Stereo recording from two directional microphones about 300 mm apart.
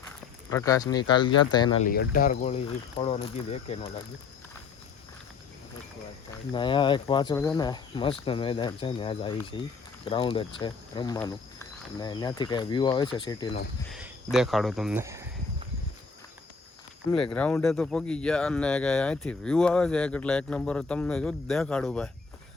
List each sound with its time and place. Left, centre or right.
0.5 s speech: centre
1.9 s speech: left
6.5 s speech: centre
13.9 s speech: centre
17.3 s speech: centre